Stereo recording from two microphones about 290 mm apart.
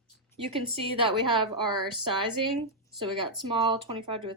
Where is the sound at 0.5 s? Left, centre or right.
Centre.